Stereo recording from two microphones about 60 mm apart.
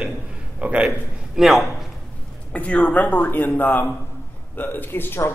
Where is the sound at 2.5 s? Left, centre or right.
Left.